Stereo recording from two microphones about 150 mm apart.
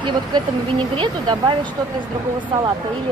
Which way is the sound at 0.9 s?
30° right (ahead or behind).